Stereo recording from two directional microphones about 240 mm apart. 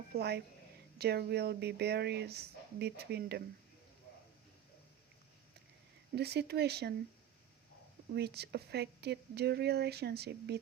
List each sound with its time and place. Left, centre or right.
0.1 s speech: right
6.1 s speech: right
8.1 s speech: right